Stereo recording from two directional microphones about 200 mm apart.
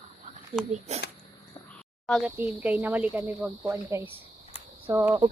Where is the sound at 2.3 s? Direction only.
10° right (ahead or behind).